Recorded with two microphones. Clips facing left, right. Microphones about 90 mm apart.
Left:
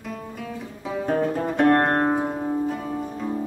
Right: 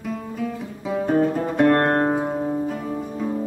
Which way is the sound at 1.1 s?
5° right (ahead or behind).